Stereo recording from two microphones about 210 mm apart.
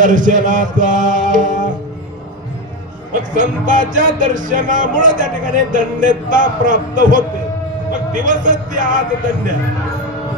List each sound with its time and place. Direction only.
0.0 s music: 40° right (ahead or behind)
3.1 s music: 35° right (ahead or behind)